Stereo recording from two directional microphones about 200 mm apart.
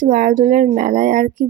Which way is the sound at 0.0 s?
45° right (ahead or behind).